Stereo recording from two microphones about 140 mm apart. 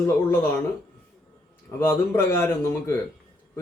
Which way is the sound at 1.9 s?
15° left (ahead or behind).